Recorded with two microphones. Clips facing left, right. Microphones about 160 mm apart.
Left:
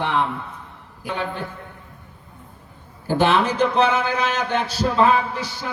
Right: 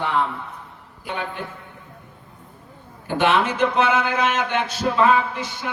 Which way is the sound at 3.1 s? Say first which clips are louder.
Left 1 dB; 35° left (ahead or behind).